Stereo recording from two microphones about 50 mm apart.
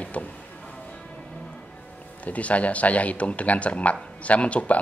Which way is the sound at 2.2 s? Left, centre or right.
Left.